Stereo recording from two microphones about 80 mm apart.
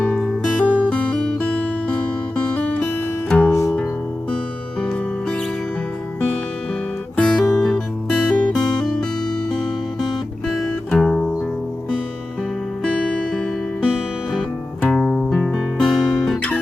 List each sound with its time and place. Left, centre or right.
0.0 s music: centre
4.8 s music: centre
7.2 s guitar: centre
7.5 s music: centre
10.1 s guitar: centre
13.3 s music: centre
15.5 s guitar: centre